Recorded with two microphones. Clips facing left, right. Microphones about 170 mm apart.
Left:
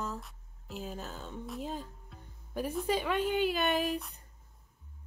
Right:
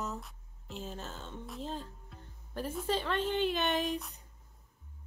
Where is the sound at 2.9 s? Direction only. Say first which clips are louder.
Left 1 dB; 10° left (ahead or behind).